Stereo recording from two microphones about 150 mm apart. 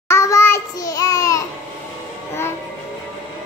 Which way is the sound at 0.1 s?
20° left (ahead or behind).